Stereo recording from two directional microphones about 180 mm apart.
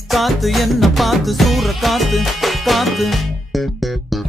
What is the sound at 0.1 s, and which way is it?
Music, centre (ahead or behind).